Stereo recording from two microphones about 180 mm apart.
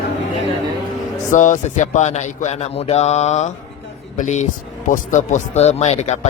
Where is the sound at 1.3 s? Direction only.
45° left (ahead or behind).